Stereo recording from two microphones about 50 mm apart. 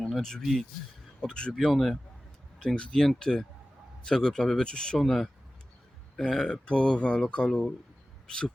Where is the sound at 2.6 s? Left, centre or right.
Centre.